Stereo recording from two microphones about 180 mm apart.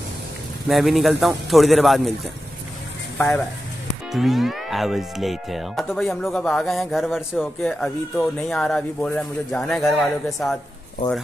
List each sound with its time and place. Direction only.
0.7 s speech: centre (ahead or behind)
3.2 s speech: 10° left (ahead or behind)
4.1 s speech: centre (ahead or behind)
11.0 s speech: 30° left (ahead or behind)